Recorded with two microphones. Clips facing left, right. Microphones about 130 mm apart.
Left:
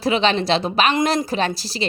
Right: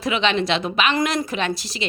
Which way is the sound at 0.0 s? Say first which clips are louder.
Left 2 dB; 35° left (ahead or behind).